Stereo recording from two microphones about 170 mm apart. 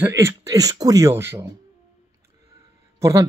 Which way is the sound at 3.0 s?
20° right (ahead or behind).